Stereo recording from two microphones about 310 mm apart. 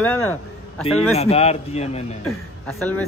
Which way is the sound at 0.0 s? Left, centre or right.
Centre.